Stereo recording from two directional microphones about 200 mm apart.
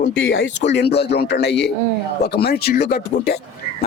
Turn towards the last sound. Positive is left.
turn(degrees=55)  # may be behind; listen again after turning